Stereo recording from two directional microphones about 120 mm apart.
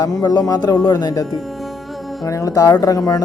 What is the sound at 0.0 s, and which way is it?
Speech, 30° left (ahead or behind).